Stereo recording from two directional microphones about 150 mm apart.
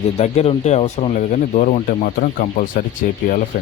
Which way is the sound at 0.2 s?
45° left (ahead or behind).